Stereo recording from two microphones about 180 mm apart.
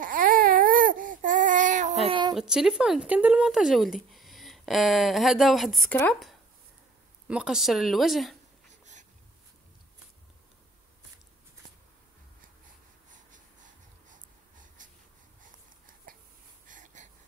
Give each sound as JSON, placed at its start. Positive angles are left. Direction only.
{"t": 0.0, "sound": "baby cry", "side_deg": -50}
{"t": 2.0, "sound": "a sound", "side_deg": -25}
{"t": 2.3, "sound": "speech", "side_deg": -5}
{"t": 7.2, "sound": "speech", "side_deg": -5}
{"t": 8.6, "sound": "wheeze", "side_deg": -40}
{"t": 13.1, "sound": "wheeze", "side_deg": -45}
{"t": 16.1, "sound": "a sound", "side_deg": -50}